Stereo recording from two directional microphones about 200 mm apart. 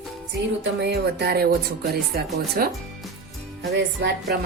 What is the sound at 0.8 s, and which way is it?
Speech, 55° right (ahead or behind).